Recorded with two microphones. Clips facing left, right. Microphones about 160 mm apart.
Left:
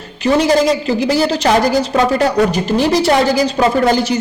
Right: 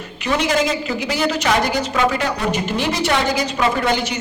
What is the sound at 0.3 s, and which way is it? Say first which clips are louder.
A woman's voice: left 7 dB; 35° left (ahead or behind).